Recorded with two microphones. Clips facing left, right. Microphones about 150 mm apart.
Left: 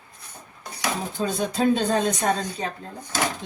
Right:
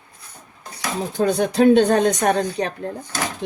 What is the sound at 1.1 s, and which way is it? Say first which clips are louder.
Speech: right 10 dB; 70° right (ahead or behind).